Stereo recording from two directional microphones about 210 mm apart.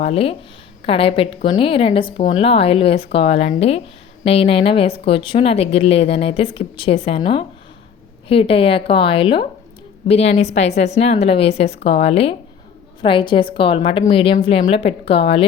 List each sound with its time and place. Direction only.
0.0 s a woman's voice: 30° left (ahead or behind)